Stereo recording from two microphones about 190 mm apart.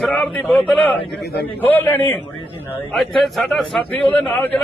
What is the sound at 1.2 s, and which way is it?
Speech, 55° left (ahead or behind).